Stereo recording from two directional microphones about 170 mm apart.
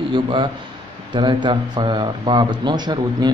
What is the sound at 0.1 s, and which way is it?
Speech, 30° right (ahead or behind).